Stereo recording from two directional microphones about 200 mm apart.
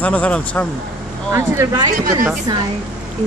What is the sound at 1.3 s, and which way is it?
Speech, 15° right (ahead or behind).